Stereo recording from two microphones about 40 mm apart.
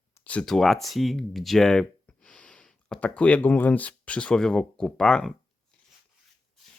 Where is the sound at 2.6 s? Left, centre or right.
Centre.